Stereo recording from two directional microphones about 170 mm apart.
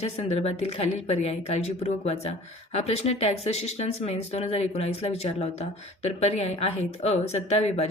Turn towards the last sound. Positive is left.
turn(degrees=40)  # may be behind; listen again after turning